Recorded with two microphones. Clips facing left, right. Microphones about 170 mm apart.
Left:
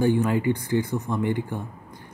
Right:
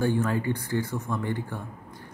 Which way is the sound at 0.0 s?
15° left (ahead or behind).